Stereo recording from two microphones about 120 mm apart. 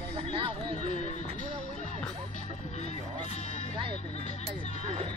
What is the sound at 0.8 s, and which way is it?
Speech, 80° left.